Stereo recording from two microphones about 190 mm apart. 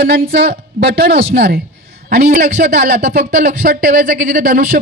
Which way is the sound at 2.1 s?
40° right (ahead or behind).